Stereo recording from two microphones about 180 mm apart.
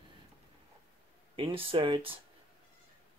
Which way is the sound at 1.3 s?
30° right (ahead or behind).